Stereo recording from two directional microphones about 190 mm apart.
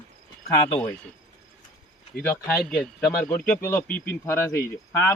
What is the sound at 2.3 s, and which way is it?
Speech, 5° left (ahead or behind).